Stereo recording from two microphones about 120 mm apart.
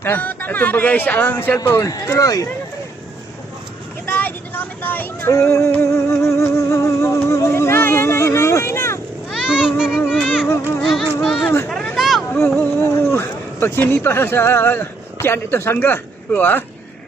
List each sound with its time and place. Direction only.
0.0 s speech: 15° left (ahead or behind)
4.0 s vehicle: 15° left (ahead or behind)
9.3 s a sound: 5° right (ahead or behind)
9.7 s music: 5° right (ahead or behind)
10.1 s a sound: centre (ahead or behind)
12.5 s speech: 15° left (ahead or behind)